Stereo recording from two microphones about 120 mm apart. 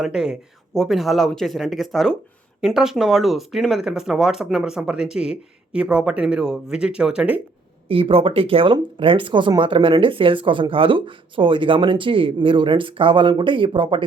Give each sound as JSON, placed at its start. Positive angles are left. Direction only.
{"t": 0.0, "sound": "speech", "side_deg": -5}
{"t": 7.9, "sound": "speech", "side_deg": -50}